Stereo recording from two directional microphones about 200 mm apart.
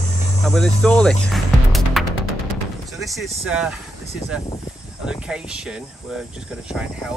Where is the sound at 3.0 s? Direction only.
Centre (ahead or behind).